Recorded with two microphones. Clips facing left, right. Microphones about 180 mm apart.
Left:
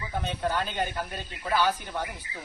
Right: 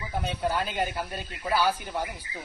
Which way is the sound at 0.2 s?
5° right (ahead or behind).